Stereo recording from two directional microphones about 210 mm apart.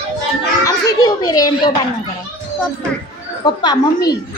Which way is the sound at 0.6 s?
15° left (ahead or behind).